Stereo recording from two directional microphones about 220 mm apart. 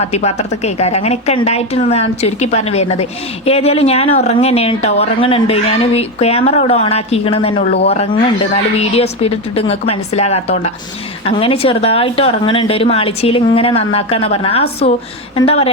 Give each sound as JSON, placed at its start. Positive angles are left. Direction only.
{"t": 0.0, "sound": "a woman's voice", "side_deg": 30}